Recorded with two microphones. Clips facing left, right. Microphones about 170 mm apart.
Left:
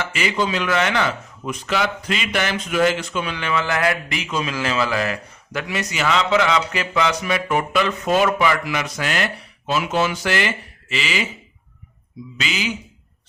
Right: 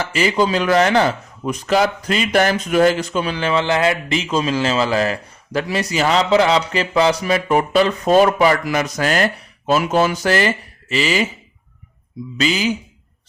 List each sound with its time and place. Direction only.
0.0 s speech: 35° right (ahead or behind)
12.4 s speech: 40° right (ahead or behind)